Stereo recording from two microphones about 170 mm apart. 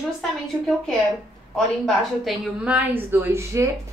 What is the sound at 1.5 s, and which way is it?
A woman's voice, centre (ahead or behind).